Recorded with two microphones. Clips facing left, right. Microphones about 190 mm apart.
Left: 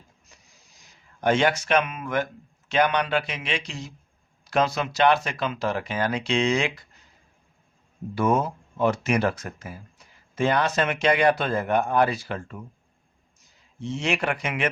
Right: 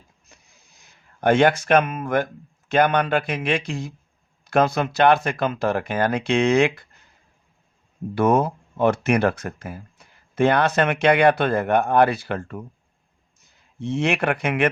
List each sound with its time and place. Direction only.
0.3 s a sound: 55° right (ahead or behind)
2.6 s speech: 50° right (ahead or behind)
8.1 s speech: 60° right (ahead or behind)
13.7 s speech: 60° right (ahead or behind)